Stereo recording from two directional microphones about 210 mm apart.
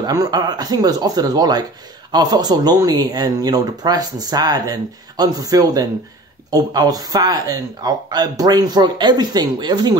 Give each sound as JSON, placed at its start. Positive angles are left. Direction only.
{"t": 0.0, "sound": "speech", "side_deg": -20}